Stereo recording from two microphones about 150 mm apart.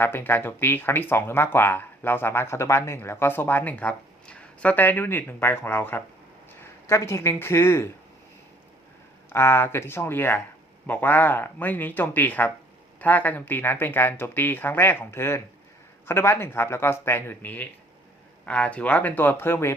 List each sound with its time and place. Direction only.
0.0 s speech: 15° left (ahead or behind)
9.3 s speech: 15° left (ahead or behind)